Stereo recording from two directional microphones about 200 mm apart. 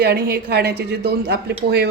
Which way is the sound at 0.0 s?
55° right (ahead or behind).